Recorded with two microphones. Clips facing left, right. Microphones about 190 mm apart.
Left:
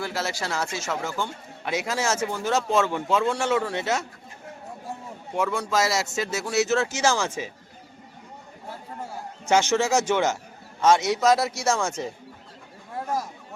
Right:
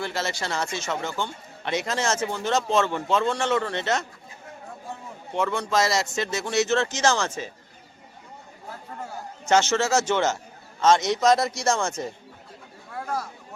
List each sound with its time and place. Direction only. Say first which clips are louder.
0.0 s speech: even; 5° left (ahead or behind)
5.3 s speech: even; 5° left (ahead or behind)
9.5 s speech: even; 10° left (ahead or behind)
12.9 s a sound: left 2 dB; 20° left (ahead or behind)